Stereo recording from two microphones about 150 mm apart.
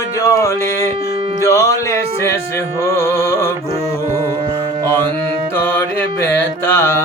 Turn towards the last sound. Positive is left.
turn(degrees=15)  # may be behind; listen again after turning